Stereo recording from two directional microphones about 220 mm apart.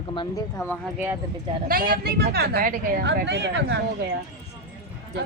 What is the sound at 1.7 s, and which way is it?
Speech, 40° right (ahead or behind).